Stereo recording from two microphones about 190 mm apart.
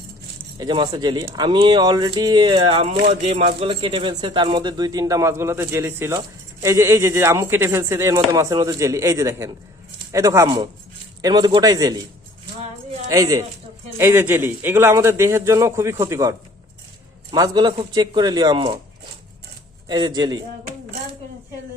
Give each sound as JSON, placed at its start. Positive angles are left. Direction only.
{"t": 0.6, "sound": "speech", "side_deg": -20}
{"t": 13.1, "sound": "speech", "side_deg": -20}
{"t": 17.3, "sound": "speech", "side_deg": -20}
{"t": 19.9, "sound": "speech", "side_deg": -20}